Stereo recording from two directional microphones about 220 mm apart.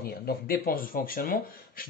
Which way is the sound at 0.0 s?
45° left (ahead or behind).